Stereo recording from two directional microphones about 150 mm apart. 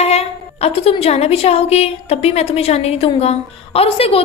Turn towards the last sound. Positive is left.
turn(degrees=40)  # may be behind; listen again after turning